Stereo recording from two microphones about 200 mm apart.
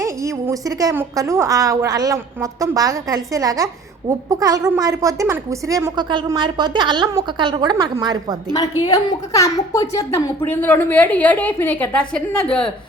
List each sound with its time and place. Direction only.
0.0 s a woman's voice: 15° right (ahead or behind)
8.8 s a woman's voice: 15° left (ahead or behind)